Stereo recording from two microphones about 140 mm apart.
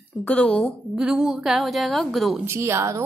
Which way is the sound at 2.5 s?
20° right (ahead or behind).